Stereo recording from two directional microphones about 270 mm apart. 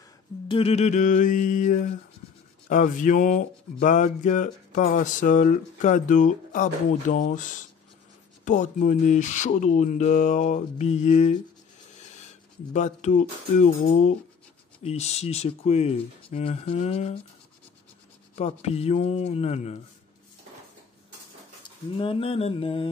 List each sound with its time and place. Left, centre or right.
0.5 s speech: left
12.7 s speech: left
14.8 s speech: left
18.3 s speech: left
21.9 s speech: centre